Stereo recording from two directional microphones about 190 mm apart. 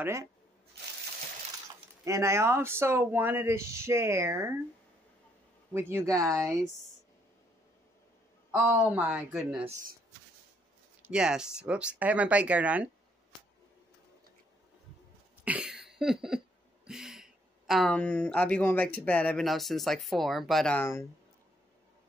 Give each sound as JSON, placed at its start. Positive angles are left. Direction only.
{"t": 0.0, "sound": "speech", "side_deg": -15}
{"t": 2.0, "sound": "speech", "side_deg": -15}
{"t": 5.7, "sound": "speech", "side_deg": -10}
{"t": 8.5, "sound": "speech", "side_deg": -15}
{"t": 11.0, "sound": "speech", "side_deg": -5}
{"t": 15.4, "sound": "a sound", "side_deg": -5}